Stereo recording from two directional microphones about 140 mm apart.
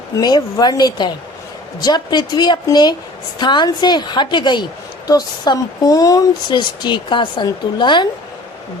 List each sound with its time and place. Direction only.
0.2 s a woman's voice: 30° left (ahead or behind)